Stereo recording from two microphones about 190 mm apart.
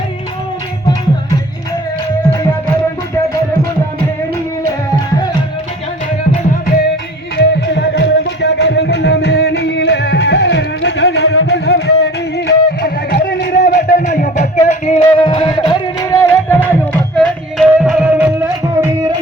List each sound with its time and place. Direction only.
7.3 s music: 60° left (ahead or behind)
14.0 s music: 40° left (ahead or behind); by 18.9 s 15° right (ahead or behind)